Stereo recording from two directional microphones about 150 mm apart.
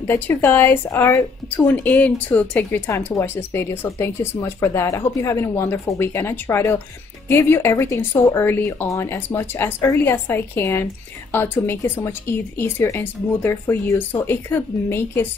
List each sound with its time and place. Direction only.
0.0 s a woman's voice: 15° left (ahead or behind)